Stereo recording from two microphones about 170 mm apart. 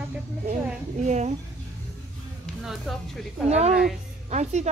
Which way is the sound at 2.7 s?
Centre (ahead or behind).